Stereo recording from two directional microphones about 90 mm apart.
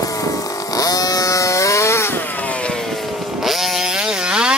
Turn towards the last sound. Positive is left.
turn(degrees=-10)  # may be behind; listen again after turning